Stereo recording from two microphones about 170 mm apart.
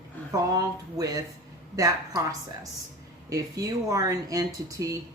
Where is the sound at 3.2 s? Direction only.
20° right (ahead or behind).